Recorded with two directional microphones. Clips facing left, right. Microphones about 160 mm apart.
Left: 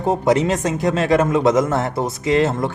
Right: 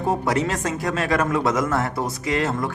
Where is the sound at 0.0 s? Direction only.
20° left (ahead or behind).